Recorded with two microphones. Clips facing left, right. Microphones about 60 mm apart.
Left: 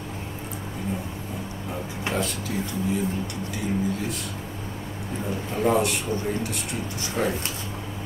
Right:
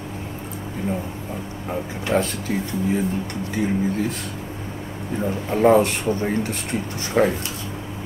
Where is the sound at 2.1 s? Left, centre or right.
Right.